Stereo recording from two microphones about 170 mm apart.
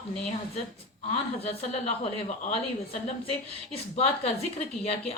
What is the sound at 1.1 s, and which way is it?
A woman's voice, 35° left (ahead or behind).